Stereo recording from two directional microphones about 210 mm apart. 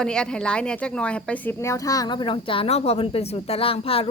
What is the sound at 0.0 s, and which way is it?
Speech, 5° left (ahead or behind).